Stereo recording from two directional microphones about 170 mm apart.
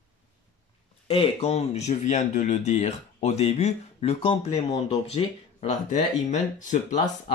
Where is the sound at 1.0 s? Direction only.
35° left (ahead or behind).